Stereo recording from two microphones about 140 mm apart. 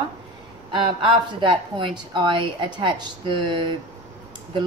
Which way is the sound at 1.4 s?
35° right (ahead or behind).